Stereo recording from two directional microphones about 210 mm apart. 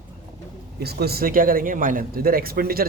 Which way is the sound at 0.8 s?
50° right (ahead or behind).